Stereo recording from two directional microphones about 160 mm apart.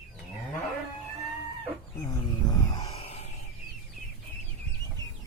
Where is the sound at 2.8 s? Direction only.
35° left (ahead or behind).